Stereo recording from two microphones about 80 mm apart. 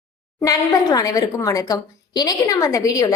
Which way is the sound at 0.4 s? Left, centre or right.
Left.